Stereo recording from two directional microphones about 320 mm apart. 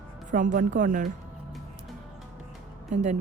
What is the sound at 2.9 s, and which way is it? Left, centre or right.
Speech, right.